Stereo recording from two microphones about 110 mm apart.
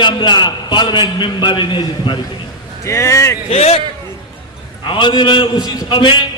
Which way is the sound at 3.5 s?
65° left (ahead or behind).